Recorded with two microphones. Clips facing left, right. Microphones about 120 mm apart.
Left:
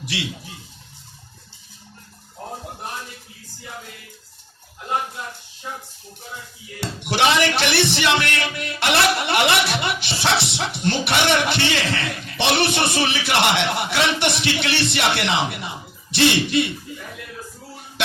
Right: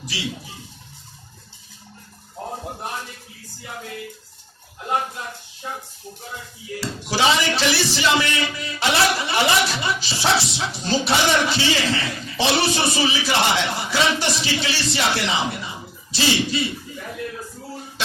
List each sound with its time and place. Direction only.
0.1 s speech: 65° left (ahead or behind)
6.7 s speech: 65° left (ahead or behind)